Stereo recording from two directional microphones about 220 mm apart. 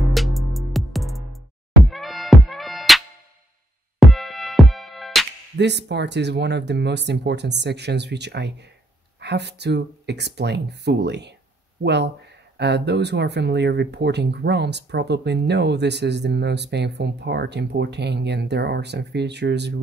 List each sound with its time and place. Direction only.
0.1 s music: centre (ahead or behind)
4.0 s music: centre (ahead or behind)
5.6 s speech: 50° right (ahead or behind)